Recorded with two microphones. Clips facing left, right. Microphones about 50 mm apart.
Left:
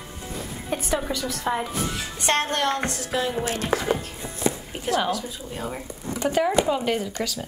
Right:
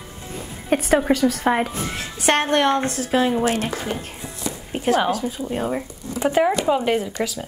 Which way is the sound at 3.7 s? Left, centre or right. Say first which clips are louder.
Left 4 dB; left.